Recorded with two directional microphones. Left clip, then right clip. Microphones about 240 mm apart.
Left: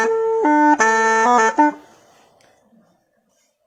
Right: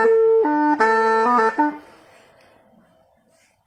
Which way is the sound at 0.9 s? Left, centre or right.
Left.